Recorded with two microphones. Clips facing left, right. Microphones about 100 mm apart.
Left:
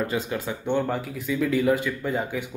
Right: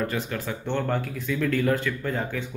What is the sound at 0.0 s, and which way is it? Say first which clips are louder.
Speech: left 2 dB; 20° left (ahead or behind).